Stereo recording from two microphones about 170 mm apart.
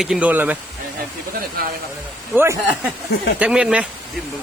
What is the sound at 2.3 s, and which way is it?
Speech, 15° right (ahead or behind).